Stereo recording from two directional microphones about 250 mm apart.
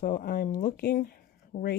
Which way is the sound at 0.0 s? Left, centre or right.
Left.